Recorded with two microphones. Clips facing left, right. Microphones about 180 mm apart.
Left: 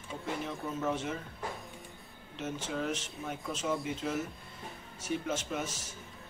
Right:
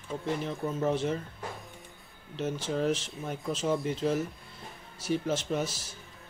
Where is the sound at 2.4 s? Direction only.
30° right (ahead or behind).